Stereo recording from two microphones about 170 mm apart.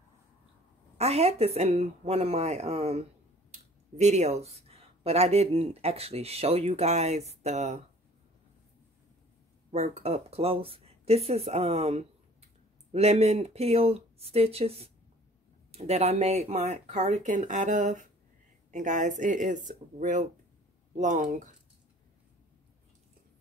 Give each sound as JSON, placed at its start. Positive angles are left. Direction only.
{"t": 0.9, "sound": "speech", "side_deg": -40}
{"t": 9.7, "sound": "speech", "side_deg": -40}